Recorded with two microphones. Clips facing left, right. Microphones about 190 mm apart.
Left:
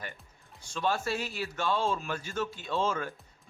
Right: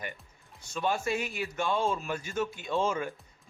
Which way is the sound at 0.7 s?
10° right (ahead or behind).